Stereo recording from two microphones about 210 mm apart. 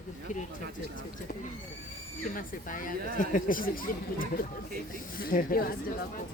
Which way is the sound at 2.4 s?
40° left (ahead or behind).